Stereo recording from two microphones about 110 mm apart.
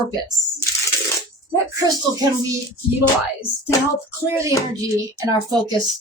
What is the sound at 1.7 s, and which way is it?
Speech, 35° right (ahead or behind).